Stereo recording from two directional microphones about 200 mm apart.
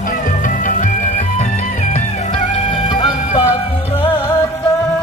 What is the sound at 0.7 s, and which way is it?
Music, 40° left (ahead or behind).